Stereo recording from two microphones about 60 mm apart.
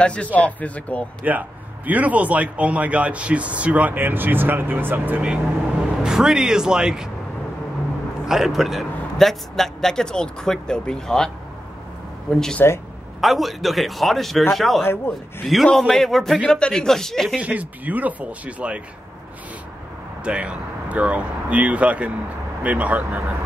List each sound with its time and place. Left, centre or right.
0.0 s a man's voice: left
1.2 s speech: right
6.0 s speech: centre
8.3 s a man's voice: centre
13.2 s speech: centre
14.8 s a man's voice: left
15.4 s a man's voice: centre
17.4 s speech: right
20.2 s speech: centre